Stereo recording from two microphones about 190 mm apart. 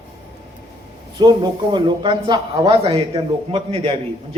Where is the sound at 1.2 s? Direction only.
20° right (ahead or behind).